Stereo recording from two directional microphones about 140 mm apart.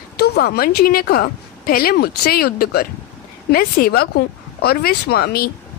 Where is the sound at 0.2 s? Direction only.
90° left.